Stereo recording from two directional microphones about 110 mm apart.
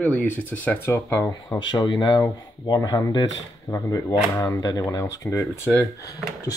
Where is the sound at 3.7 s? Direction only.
25° left (ahead or behind).